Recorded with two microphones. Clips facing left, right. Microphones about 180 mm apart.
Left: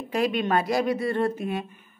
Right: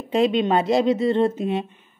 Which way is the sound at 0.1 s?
25° right (ahead or behind).